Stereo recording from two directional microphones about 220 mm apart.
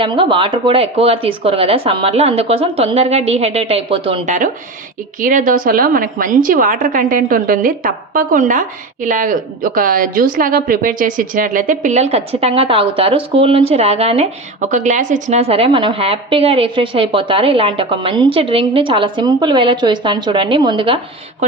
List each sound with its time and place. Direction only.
0.0 s a woman's voice: 25° right (ahead or behind)
5.2 s a woman's voice: 35° right (ahead or behind)